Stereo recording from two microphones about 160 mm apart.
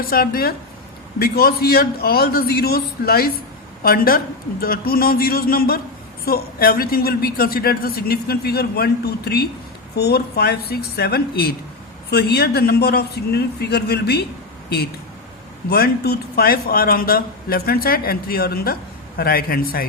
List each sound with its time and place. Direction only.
0.0 s a man's voice: 65° left (ahead or behind)
12.1 s a man's voice: 90° left
15.7 s a man's voice: 75° left (ahead or behind)